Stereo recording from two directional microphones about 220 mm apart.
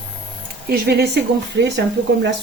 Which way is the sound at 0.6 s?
45° right (ahead or behind).